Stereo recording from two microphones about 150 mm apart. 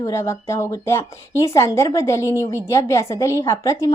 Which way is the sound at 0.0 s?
20° left (ahead or behind).